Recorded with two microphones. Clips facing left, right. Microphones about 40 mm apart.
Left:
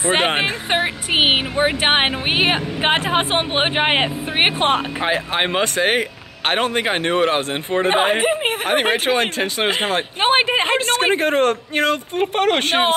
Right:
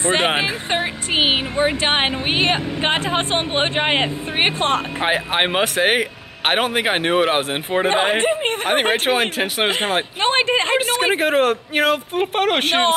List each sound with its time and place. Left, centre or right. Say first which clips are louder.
0.4 s speech: left 2 dB; left
5.0 s a man's voice: right 1 dB; centre
8.0 s a man's voice: left 1 dB; centre
9.7 s speech: even; centre
10.2 s speech: left 2 dB; centre
10.9 s speech: left 1 dB; centre